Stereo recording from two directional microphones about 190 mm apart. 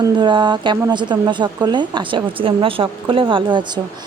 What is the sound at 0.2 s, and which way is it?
A woman's voice, 25° right (ahead or behind).